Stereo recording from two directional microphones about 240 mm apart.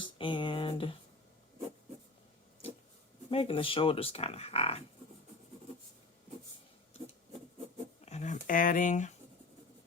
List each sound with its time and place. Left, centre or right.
0.0 s a sound: left
3.2 s speech: left
8.0 s speech: left